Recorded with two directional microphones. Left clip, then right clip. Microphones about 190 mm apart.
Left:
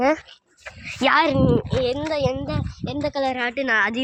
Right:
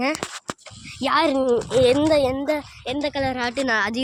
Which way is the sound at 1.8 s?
40° right (ahead or behind).